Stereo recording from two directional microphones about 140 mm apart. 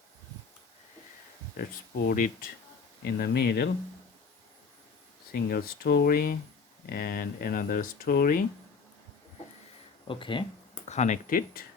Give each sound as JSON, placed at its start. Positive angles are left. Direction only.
{"t": 1.5, "sound": "speech", "side_deg": 90}
{"t": 5.3, "sound": "speech", "side_deg": 90}
{"t": 10.1, "sound": "speech", "side_deg": 35}
{"t": 10.8, "sound": "speech", "side_deg": 55}